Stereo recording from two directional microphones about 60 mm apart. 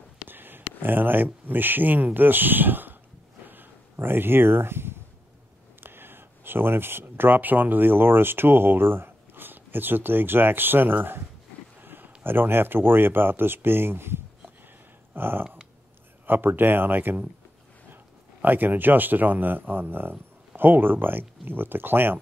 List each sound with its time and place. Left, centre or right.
0.3 s speech: right
3.4 s a sound: right
5.8 s speech: right
18.4 s speech: right